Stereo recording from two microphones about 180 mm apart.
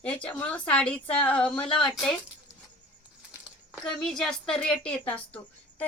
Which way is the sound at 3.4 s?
Centre (ahead or behind).